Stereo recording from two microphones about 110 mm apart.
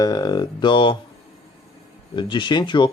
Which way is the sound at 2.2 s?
45° left (ahead or behind).